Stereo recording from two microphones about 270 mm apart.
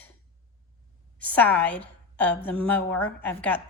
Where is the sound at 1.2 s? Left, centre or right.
Centre.